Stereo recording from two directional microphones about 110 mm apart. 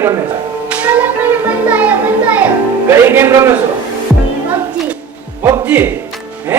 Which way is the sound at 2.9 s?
20° right (ahead or behind).